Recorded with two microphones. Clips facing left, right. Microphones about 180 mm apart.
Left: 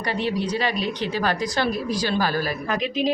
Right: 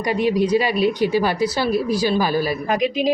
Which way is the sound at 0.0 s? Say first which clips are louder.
Right 6 dB; 10° right (ahead or behind).